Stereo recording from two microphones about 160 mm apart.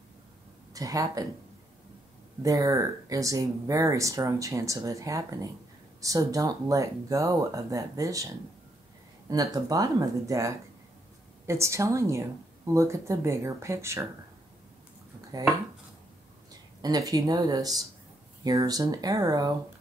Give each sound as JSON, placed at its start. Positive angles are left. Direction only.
{"t": 0.7, "sound": "speech", "side_deg": -20}
{"t": 2.4, "sound": "speech", "side_deg": -20}
{"t": 9.3, "sound": "speech", "side_deg": -20}
{"t": 15.3, "sound": "speech", "side_deg": -25}
{"t": 16.8, "sound": "speech", "side_deg": -25}